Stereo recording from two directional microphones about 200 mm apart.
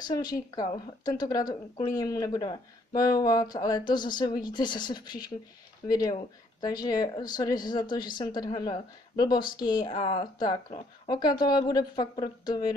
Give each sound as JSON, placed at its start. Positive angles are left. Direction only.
{"t": 0.0, "sound": "a woman's voice", "side_deg": 20}